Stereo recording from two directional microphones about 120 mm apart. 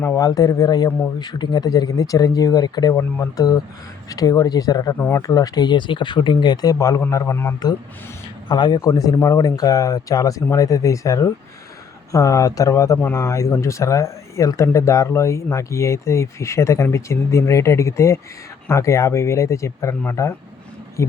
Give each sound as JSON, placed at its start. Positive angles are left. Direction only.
{"t": 0.0, "sound": "speech", "side_deg": 25}
{"t": 2.9, "sound": "speech", "side_deg": 20}
{"t": 4.9, "sound": "speech", "side_deg": 20}
{"t": 5.2, "sound": "speech", "side_deg": 30}
{"t": 8.4, "sound": "speech", "side_deg": 35}